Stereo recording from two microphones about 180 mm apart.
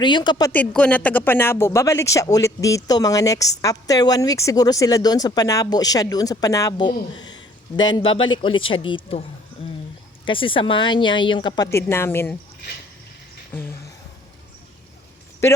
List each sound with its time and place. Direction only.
0.0 s speech: 25° left (ahead or behind)
0.5 s speech: 5° left (ahead or behind); by 9.2 s 30° left (ahead or behind)
10.2 s speech: 30° left (ahead or behind); by 12.4 s 10° left (ahead or behind)
13.5 s a sound: 10° left (ahead or behind)